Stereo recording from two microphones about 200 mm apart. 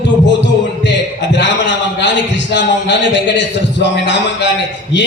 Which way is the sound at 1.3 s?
60° left (ahead or behind).